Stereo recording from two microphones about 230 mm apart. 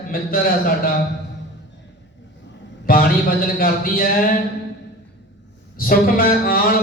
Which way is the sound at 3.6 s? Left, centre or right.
Left.